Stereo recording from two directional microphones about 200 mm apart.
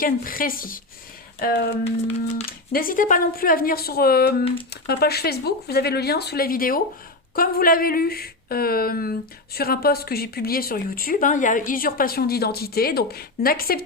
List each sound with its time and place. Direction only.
0.0 s speech: 45° left (ahead or behind)